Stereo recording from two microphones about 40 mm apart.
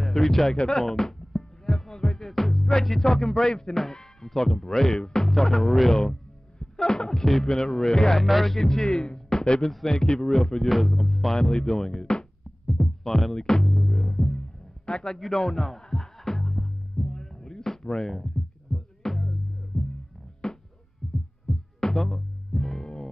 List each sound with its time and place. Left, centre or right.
0.0 s speech: centre
0.7 s music: centre
3.0 s speech: centre
9.7 s speech: centre
9.9 s speech: centre
10.7 s speech: centre
11.3 s speech: centre
12.6 s heart sounds: centre
13.4 s speech: centre
13.7 s music: centre
14.9 s a man's voice: left
15.1 s music: centre
21.0 s heart sounds: centre
21.7 s music: centre